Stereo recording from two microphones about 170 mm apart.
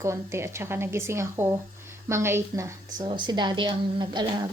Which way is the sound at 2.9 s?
25° right (ahead or behind).